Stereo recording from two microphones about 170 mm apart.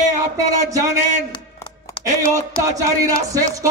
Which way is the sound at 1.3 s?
25° left (ahead or behind).